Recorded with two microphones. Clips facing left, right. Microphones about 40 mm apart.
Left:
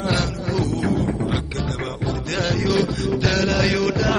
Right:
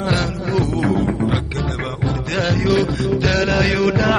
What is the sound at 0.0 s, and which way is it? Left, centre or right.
Music, centre.